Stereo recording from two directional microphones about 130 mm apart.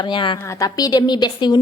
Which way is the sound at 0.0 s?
40° left (ahead or behind).